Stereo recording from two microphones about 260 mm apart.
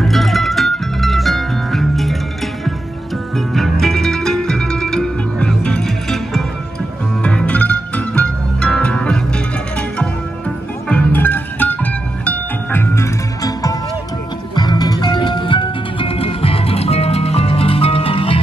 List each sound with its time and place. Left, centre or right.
0.0 s music: centre
3.3 s zither: centre
7.2 s music: centre
10.9 s music: centre; by 18.4 s left